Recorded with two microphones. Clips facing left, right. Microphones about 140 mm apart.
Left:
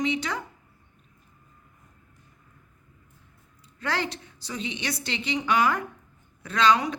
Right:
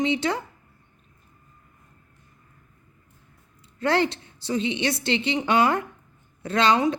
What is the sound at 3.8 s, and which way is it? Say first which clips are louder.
A woman's voice: right 7 dB; 25° right (ahead or behind).